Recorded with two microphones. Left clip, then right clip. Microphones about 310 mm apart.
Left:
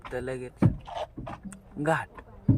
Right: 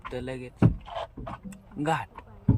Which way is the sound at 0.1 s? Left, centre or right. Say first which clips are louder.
Left 3 dB; centre.